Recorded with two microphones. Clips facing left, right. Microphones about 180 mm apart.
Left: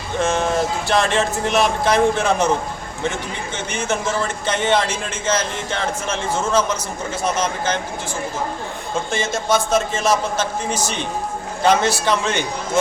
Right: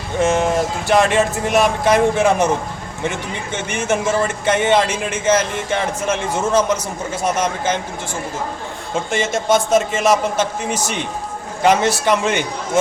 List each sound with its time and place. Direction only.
0.2 s a man's voice: 20° right (ahead or behind)
3.7 s a man's voice: 20° right (ahead or behind)
9.0 s a man's voice: 20° right (ahead or behind)